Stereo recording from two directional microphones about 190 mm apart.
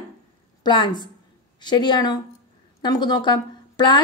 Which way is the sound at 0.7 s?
25° left (ahead or behind).